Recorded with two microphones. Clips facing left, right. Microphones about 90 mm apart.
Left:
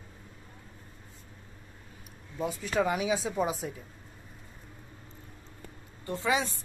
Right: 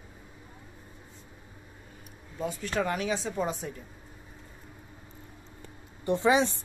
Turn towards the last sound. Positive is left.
turn(degrees=-25)  # may be behind; listen again after turning